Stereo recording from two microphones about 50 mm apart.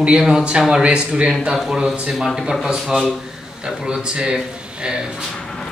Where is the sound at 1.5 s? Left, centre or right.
Centre.